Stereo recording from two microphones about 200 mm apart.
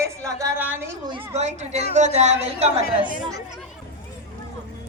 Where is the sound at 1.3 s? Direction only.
35° right (ahead or behind).